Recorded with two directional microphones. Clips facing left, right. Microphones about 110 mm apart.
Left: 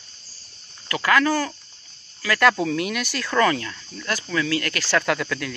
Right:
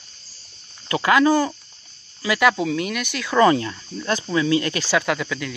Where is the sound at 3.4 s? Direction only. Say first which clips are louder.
Right 5 dB; 25° right (ahead or behind).